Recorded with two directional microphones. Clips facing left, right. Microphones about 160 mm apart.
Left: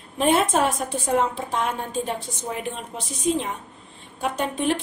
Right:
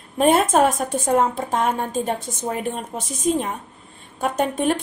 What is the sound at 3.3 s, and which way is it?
A woman's voice, 45° right (ahead or behind).